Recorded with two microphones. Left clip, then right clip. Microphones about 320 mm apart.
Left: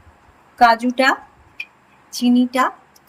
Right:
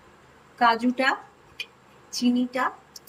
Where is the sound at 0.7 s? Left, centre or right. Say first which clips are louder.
Left 7 dB; centre.